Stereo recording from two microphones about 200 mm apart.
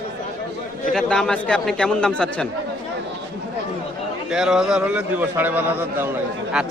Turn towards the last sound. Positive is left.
turn(degrees=-10)  # may be behind; listen again after turning